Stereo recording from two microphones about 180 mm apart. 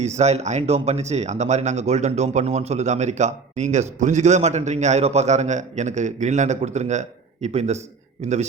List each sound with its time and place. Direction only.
0.0 s speech: 40° right (ahead or behind)